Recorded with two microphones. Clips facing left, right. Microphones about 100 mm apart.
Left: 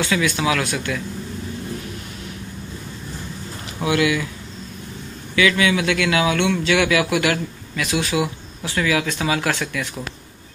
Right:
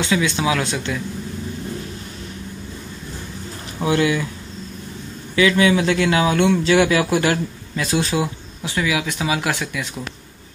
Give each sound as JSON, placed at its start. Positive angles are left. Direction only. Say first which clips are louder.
{"t": 0.0, "sound": "speech", "louder": "right 1 dB", "side_deg": -20}
{"t": 3.8, "sound": "a man's voice", "louder": "right 1 dB", "side_deg": -30}
{"t": 5.3, "sound": "a man's voice", "louder": "right 2 dB", "side_deg": -30}
{"t": 8.7, "sound": "speech", "louder": "left 1 dB", "side_deg": -15}